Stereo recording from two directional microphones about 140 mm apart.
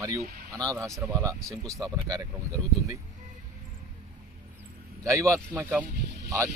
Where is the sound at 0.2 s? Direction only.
90° right.